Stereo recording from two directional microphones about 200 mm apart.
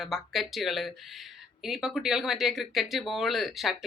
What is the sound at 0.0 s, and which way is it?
Speech, centre (ahead or behind).